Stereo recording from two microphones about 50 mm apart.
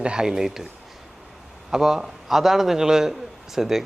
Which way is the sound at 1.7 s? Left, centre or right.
Centre.